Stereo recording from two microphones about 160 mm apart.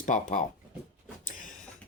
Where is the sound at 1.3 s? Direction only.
55° left (ahead or behind).